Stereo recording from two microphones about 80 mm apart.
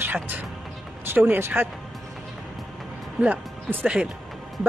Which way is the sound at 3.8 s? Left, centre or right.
Centre.